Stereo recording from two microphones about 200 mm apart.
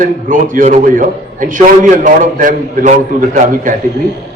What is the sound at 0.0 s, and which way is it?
A man's voice, 40° right (ahead or behind).